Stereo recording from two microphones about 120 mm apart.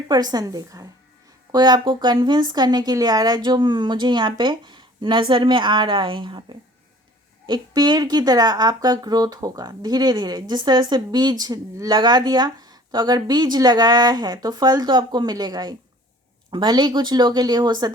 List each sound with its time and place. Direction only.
0.1 s a woman's voice: 35° right (ahead or behind)